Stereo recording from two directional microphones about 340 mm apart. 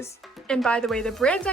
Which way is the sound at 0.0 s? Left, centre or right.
Centre.